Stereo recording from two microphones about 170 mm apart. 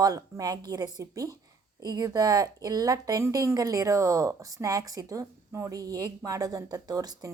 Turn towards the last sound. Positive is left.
turn(degrees=-20)  # may be behind; listen again after turning